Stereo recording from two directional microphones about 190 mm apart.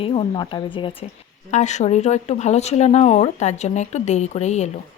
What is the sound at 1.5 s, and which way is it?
Speech, 40° left (ahead or behind).